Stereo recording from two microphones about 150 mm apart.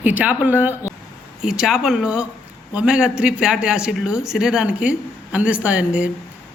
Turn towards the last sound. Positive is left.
turn(degrees=-5)  # may be behind; listen again after turning